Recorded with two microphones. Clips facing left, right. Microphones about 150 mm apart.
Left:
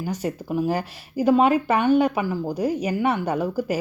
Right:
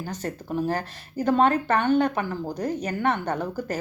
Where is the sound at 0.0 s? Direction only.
10° left (ahead or behind).